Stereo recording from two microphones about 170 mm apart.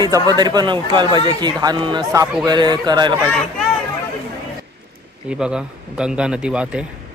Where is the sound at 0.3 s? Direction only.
25° right (ahead or behind).